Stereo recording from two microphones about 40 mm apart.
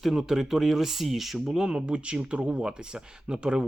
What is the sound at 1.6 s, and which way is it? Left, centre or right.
Speech, right.